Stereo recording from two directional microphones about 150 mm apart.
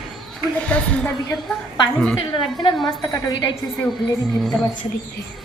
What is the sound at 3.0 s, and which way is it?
Speech, 25° left (ahead or behind).